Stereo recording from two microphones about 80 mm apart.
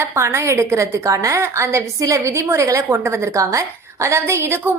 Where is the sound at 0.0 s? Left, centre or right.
Right.